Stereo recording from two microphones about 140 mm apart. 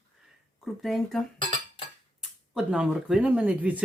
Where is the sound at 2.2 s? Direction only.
5° right (ahead or behind).